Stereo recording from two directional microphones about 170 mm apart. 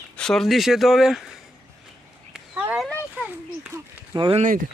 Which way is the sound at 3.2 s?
10° right (ahead or behind).